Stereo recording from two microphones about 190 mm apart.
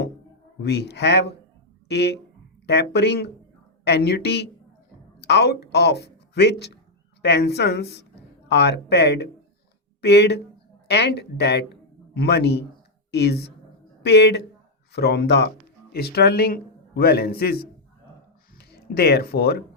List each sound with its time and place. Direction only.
0.6 s a woman's voice: 60° left (ahead or behind)